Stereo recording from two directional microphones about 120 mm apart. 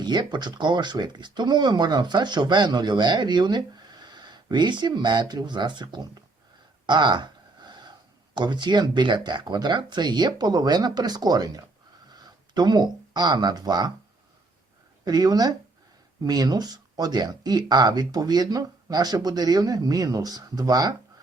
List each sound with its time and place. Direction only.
0.0 s speech: 35° right (ahead or behind)
6.8 s a sound: 40° right (ahead or behind)
8.4 s speech: 40° right (ahead or behind)
15.0 s speech: 35° right (ahead or behind)